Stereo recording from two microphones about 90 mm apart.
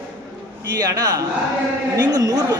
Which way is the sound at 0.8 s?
45° right (ahead or behind).